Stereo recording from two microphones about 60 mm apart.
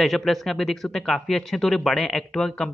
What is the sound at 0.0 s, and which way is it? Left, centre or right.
Speech, centre.